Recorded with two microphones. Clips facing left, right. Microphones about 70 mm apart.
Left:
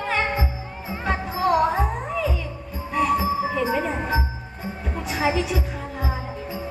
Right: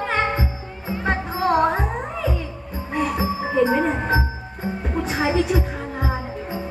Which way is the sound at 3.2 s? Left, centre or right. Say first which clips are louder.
Right 3 dB; right.